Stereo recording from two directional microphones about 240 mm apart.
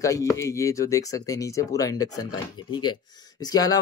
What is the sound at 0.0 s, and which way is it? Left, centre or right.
Speech, centre.